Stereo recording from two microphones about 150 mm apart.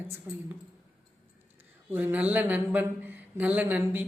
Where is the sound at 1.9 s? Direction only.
10° right (ahead or behind).